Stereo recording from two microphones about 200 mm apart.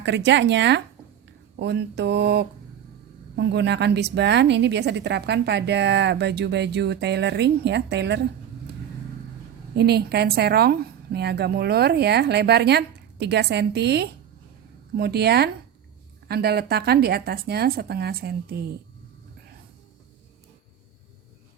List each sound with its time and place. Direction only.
0.0 s a woman's voice: 60° right (ahead or behind)
9.7 s a woman's voice: 55° right (ahead or behind)